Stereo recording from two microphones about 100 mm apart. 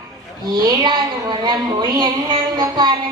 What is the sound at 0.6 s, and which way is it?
Speech, 45° right (ahead or behind).